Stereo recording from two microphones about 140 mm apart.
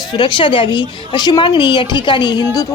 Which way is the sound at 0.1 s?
35° left (ahead or behind).